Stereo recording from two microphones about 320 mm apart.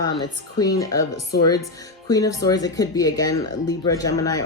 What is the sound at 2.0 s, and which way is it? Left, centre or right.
A woman's voice, centre.